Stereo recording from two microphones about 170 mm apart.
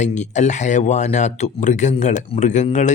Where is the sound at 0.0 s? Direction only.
45° left (ahead or behind).